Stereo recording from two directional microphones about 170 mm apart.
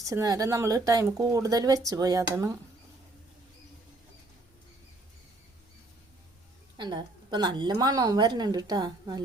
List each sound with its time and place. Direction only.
0.1 s speech: 20° right (ahead or behind)
6.7 s speech: 25° right (ahead or behind)